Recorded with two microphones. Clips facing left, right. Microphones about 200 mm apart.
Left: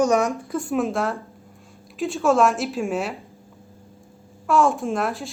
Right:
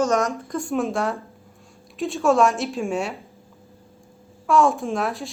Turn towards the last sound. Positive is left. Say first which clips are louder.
# left 1 dB
turn(degrees=0)  # may be behind; listen again after turning